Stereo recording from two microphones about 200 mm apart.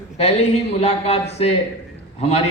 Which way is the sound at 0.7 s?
30° left (ahead or behind).